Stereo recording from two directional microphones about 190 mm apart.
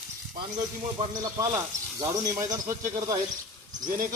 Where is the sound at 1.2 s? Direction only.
20° right (ahead or behind).